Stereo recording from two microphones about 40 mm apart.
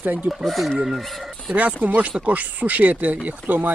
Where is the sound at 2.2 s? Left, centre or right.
Right.